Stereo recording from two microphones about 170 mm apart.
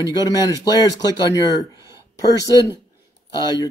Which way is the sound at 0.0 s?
25° left (ahead or behind).